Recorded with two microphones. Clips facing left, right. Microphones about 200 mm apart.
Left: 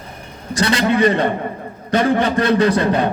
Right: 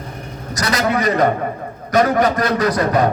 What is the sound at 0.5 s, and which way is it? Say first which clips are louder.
A man's voice: left 2 dB; 30° left (ahead or behind).